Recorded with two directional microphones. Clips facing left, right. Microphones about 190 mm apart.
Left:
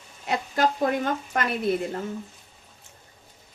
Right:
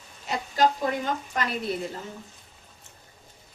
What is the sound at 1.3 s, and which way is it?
Speech, 60° left (ahead or behind).